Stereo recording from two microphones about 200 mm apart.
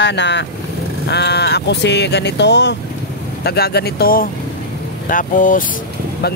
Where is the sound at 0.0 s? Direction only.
60° left (ahead or behind); by 5.6 s 40° left (ahead or behind).